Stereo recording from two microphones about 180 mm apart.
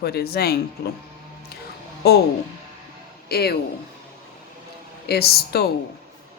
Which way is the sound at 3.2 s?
60° left (ahead or behind).